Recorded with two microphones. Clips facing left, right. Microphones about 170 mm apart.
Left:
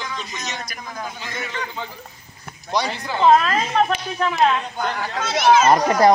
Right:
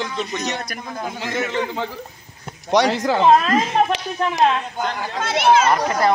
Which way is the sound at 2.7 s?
85° right.